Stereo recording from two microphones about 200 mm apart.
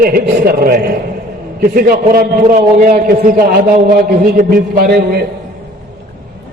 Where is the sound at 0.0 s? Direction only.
50° right (ahead or behind).